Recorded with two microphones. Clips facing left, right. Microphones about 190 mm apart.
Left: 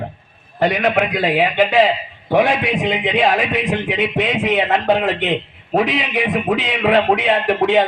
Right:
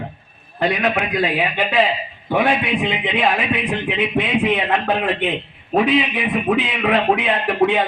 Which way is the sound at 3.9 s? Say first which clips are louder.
Even; 80° left.